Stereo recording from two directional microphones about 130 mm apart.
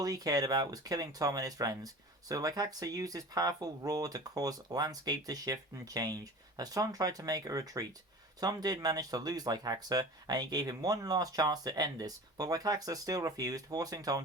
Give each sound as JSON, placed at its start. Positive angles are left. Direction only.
{"t": 0.0, "sound": "speech", "side_deg": -30}